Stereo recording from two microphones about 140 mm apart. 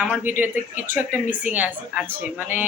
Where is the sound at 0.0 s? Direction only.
10° right (ahead or behind).